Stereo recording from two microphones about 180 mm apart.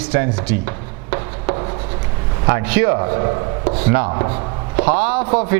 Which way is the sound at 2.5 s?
15° right (ahead or behind).